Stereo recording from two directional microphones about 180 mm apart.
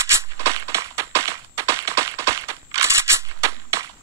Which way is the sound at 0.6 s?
15° right (ahead or behind).